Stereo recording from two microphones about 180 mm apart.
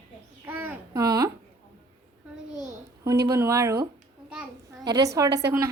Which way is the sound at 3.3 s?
15° right (ahead or behind).